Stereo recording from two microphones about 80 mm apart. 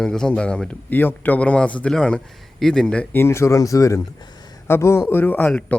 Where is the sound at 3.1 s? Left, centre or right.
Left.